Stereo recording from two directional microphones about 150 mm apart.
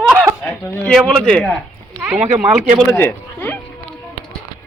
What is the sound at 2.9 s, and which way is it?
Speech, 15° left (ahead or behind).